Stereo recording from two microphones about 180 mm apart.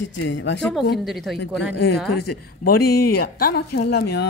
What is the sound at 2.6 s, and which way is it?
Speech, 55° left (ahead or behind).